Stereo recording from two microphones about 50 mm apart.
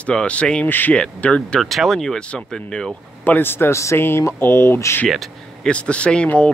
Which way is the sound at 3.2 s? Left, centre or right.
Left.